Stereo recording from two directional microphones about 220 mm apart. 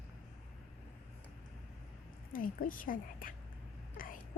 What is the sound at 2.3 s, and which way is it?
A woman's voice, 40° left (ahead or behind).